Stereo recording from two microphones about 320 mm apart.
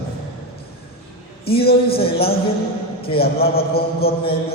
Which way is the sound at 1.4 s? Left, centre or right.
Left.